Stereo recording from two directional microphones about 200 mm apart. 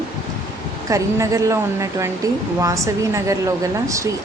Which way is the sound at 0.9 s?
15° right (ahead or behind).